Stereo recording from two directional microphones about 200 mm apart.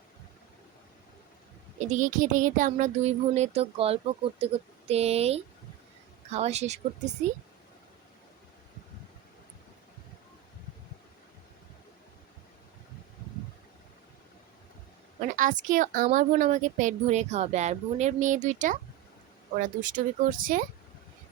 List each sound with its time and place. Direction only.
1.8 s a woman's voice: 40° right (ahead or behind)
15.2 s a woman's voice: 40° right (ahead or behind)